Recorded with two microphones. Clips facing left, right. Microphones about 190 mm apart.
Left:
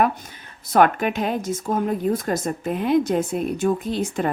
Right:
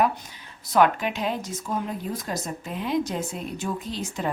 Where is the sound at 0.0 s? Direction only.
50° left (ahead or behind).